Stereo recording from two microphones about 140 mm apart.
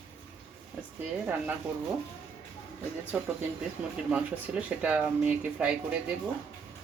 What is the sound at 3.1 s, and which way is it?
Speech, 10° right (ahead or behind).